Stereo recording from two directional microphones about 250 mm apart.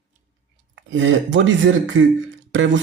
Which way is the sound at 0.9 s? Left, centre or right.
Right.